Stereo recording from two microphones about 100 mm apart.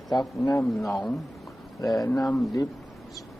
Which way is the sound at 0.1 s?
40° left (ahead or behind).